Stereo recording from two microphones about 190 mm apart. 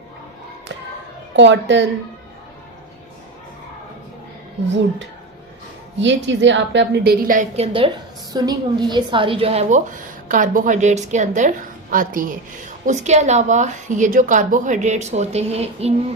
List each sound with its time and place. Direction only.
1.4 s a woman's voice: 70° right (ahead or behind)
6.0 s a woman's voice: 70° right (ahead or behind); by 7.9 s 30° right (ahead or behind)
8.3 s a woman's voice: 20° right (ahead or behind)